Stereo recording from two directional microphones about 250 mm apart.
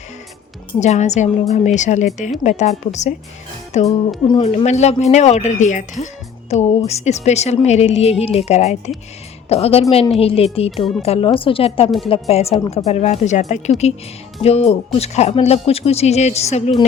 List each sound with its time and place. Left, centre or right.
0.8 s speech: left